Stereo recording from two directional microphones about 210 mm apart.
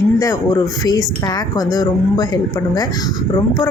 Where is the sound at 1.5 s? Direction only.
20° left (ahead or behind).